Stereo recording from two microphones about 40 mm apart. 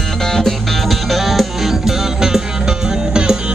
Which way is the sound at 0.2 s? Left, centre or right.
Centre.